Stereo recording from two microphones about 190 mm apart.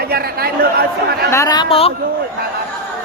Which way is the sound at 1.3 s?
20° left (ahead or behind).